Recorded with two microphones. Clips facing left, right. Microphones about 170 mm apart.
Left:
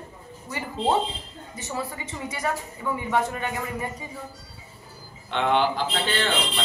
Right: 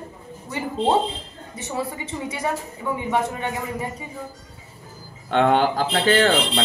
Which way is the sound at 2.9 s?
20° right (ahead or behind).